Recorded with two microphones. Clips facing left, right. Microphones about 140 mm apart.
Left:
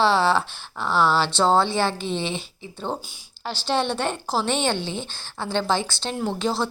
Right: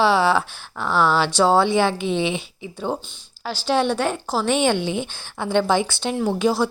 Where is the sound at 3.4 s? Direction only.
5° right (ahead or behind).